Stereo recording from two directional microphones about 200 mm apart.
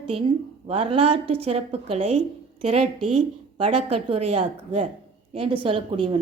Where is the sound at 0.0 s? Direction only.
25° right (ahead or behind).